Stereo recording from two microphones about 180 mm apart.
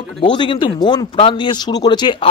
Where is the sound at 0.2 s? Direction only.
25° left (ahead or behind).